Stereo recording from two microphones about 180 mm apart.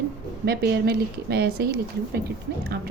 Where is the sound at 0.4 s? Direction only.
60° right (ahead or behind).